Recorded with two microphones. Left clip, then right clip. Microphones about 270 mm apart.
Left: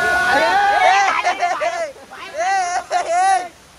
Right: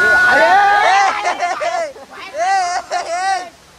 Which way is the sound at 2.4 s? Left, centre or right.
Centre.